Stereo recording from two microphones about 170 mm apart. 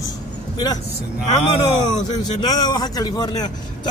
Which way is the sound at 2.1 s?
25° left (ahead or behind).